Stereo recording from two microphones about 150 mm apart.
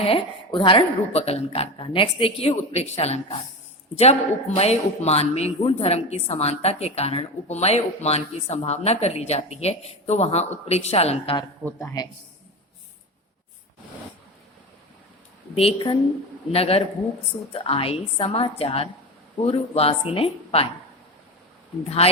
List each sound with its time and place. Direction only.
0.0 s a woman's voice: 35° left (ahead or behind)
11.6 s speech: 15° left (ahead or behind)
15.5 s a woman's voice: 35° left (ahead or behind)
21.8 s speech: 45° left (ahead or behind)